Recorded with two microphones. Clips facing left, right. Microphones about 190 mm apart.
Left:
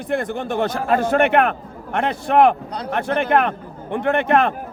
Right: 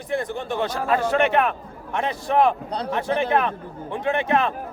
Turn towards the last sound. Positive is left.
turn(degrees=60)  # may be behind; listen again after turning